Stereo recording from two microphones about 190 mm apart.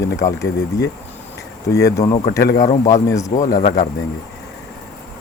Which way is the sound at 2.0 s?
30° left (ahead or behind).